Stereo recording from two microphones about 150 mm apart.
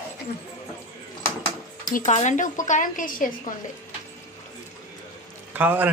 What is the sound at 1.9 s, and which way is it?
Speech, 55° left (ahead or behind).